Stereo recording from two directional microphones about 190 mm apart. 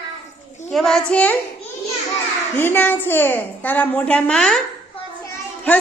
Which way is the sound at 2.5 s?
10° left (ahead or behind).